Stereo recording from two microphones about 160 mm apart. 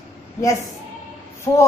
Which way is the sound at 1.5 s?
25° left (ahead or behind).